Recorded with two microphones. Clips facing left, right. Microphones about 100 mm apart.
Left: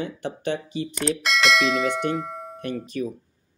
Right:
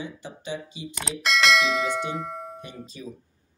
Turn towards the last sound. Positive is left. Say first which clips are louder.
# left 11 dB
turn(degrees=65)  # may be behind; listen again after turning